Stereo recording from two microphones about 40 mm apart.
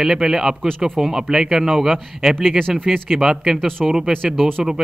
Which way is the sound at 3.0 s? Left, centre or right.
Centre.